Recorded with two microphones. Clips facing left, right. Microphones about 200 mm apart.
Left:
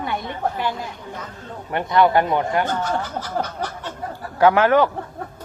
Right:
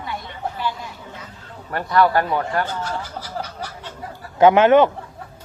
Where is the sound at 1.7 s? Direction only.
20° left (ahead or behind).